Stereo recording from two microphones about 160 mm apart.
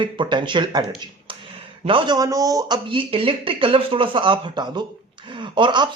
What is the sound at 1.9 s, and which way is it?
A man's voice, 30° right (ahead or behind).